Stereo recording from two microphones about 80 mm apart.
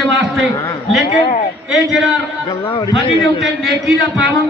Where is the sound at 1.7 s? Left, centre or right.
Centre.